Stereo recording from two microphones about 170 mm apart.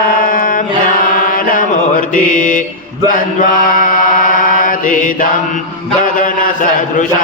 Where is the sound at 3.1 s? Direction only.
55° left (ahead or behind).